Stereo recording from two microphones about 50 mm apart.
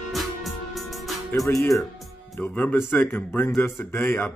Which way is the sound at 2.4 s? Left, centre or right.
Left.